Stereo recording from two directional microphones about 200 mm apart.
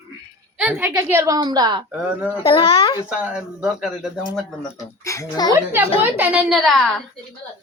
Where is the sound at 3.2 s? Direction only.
5° right (ahead or behind).